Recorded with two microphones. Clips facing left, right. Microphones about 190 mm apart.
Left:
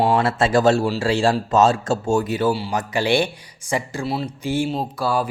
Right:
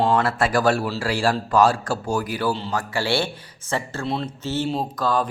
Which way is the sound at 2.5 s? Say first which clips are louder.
Left 3 dB; 15° left (ahead or behind).